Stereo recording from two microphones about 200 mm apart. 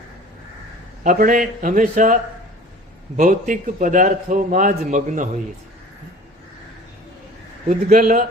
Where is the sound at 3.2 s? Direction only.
40° right (ahead or behind).